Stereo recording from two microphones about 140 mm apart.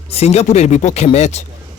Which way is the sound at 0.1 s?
50° left (ahead or behind).